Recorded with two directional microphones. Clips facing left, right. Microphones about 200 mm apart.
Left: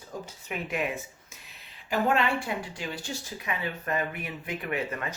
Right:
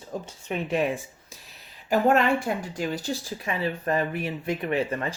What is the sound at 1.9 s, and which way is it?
Speech, 40° right (ahead or behind).